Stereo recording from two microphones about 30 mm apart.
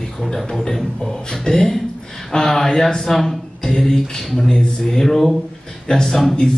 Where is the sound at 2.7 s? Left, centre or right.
Centre.